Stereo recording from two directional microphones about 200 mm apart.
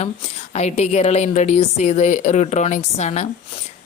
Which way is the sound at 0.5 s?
35° left (ahead or behind).